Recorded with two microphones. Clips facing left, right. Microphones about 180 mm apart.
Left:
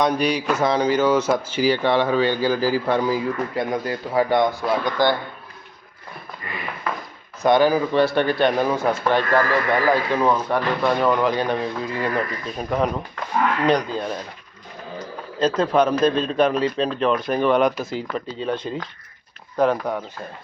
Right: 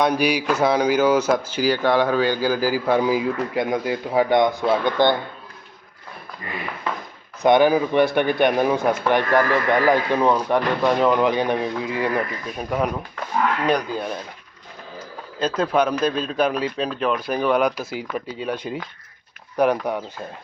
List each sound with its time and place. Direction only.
0.1 s a man's voice: 10° right (ahead or behind); by 5.1 s 25° right (ahead or behind)
7.4 s a man's voice: 20° right (ahead or behind)
15.4 s a man's voice: centre (ahead or behind)